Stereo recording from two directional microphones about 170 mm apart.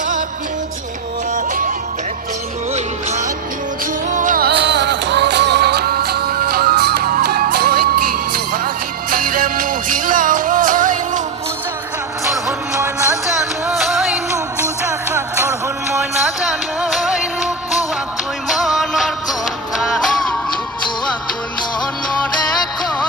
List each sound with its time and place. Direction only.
0.0 s music: 50° right (ahead or behind)
1.3 s music: 50° right (ahead or behind)
2.7 s music: 40° right (ahead or behind)
12.2 s music: 15° right (ahead or behind)
13.7 s music: centre (ahead or behind)
18.4 s music: centre (ahead or behind)